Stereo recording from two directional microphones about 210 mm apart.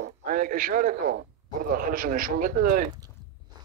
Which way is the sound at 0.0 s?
40° right (ahead or behind).